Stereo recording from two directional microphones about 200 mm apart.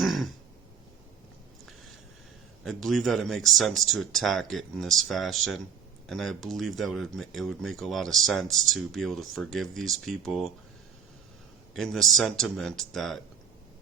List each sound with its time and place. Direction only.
0.0 s a sound: centre (ahead or behind)
2.6 s speech: centre (ahead or behind)
11.7 s speech: centre (ahead or behind)